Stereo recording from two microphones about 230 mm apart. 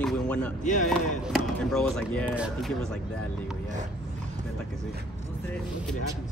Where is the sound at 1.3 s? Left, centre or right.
Centre.